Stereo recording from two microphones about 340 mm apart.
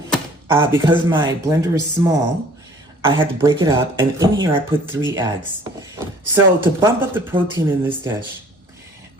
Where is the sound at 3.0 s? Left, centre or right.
Centre.